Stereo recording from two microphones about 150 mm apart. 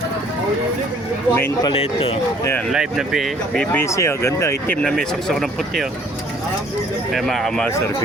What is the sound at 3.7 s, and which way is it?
Speech, 20° left (ahead or behind).